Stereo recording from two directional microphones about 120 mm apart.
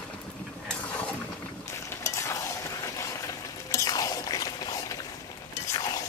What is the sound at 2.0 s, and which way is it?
Stir, 25° left (ahead or behind).